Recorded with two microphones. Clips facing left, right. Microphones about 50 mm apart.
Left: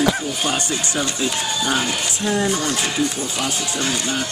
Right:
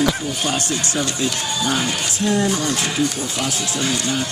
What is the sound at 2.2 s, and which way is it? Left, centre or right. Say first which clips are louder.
Speech: right 2 dB; centre.